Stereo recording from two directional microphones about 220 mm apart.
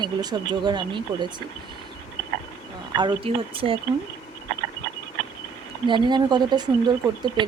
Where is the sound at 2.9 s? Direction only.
20° right (ahead or behind).